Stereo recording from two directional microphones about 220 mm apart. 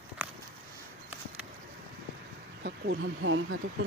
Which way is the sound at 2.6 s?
55° right (ahead or behind).